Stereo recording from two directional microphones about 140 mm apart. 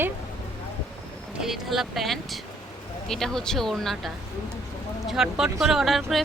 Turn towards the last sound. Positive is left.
turn(degrees=0)  # may be behind; listen again after turning